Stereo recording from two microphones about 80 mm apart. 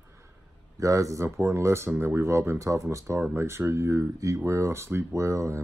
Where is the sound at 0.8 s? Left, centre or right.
Right.